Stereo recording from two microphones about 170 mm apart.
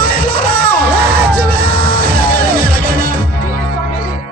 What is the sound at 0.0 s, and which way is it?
Music, 55° left (ahead or behind).